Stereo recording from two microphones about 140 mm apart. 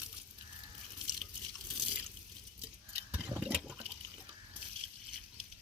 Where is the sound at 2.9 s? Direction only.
45° right (ahead or behind).